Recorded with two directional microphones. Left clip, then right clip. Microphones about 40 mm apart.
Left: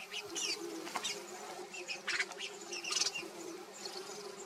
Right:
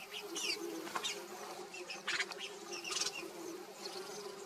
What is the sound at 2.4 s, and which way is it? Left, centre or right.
Insect, left.